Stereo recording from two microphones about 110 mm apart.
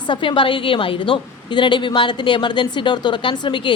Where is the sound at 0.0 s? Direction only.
50° left (ahead or behind).